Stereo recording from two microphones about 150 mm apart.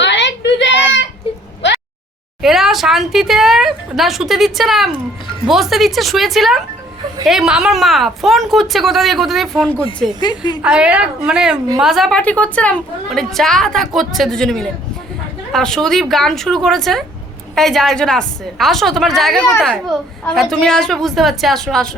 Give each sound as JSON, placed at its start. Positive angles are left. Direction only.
{"t": 2.4, "sound": "a woman's voice", "side_deg": 0}
{"t": 10.2, "sound": "a woman's voice", "side_deg": 30}
{"t": 10.6, "sound": "a woman's voice", "side_deg": -5}